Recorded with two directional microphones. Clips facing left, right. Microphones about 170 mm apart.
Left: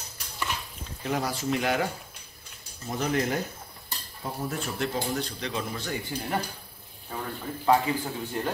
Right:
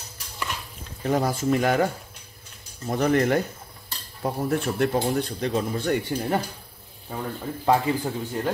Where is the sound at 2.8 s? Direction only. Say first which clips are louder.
Right 6 dB; 55° right (ahead or behind).